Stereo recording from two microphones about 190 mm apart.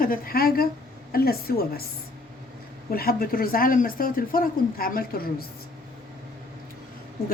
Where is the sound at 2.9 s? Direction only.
50° left (ahead or behind).